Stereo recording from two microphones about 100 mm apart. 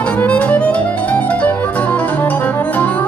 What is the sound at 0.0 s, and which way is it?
Music, 10° left (ahead or behind).